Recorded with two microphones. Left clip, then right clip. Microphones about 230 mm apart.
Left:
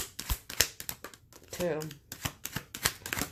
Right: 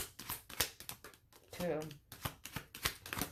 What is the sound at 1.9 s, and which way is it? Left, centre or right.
Shuffling cards, left.